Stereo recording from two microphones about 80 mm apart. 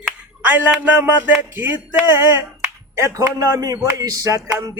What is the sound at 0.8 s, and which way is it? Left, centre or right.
Music, right.